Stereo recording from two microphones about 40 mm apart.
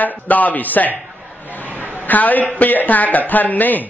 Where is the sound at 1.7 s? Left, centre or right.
Right.